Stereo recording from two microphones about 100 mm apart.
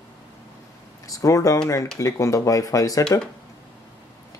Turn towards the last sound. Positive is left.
turn(degrees=35)  # may be behind; listen again after turning